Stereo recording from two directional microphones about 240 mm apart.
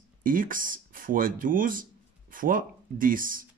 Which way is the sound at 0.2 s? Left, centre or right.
Right.